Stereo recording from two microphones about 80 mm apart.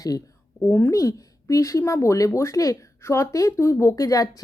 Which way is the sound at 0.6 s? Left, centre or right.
Left.